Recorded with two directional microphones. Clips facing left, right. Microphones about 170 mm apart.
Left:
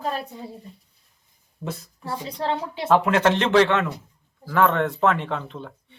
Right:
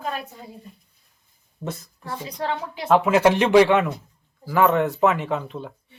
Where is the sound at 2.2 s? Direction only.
30° left (ahead or behind).